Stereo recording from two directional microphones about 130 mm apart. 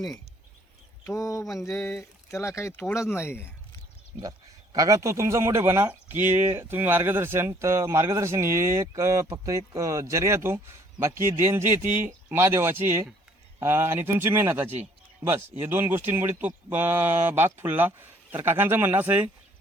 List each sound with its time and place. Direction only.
1.0 s speech: 25° left (ahead or behind)
4.2 s speech: 30° right (ahead or behind); by 19.3 s 15° right (ahead or behind)